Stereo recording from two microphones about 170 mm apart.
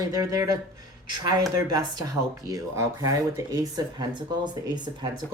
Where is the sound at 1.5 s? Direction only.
20° right (ahead or behind).